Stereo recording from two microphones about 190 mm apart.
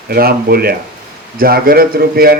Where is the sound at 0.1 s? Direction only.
55° right (ahead or behind).